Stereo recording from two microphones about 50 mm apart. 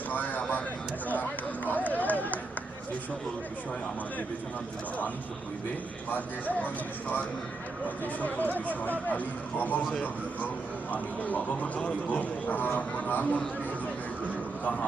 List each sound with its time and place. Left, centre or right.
0.1 s vehicle: left
1.6 s run: left
6.1 s speech: left
8.0 s speech: left
14.6 s speech: left